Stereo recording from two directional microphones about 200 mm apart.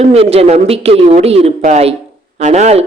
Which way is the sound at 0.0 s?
30° right (ahead or behind).